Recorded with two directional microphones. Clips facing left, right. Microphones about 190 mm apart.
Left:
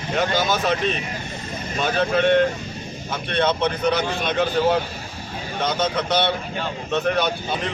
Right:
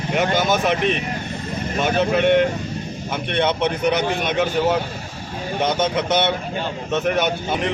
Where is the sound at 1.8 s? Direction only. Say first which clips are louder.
Right 2 dB; 15° right (ahead or behind).